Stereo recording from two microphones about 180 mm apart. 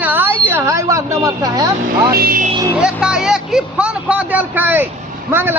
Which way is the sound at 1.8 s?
55° right (ahead or behind).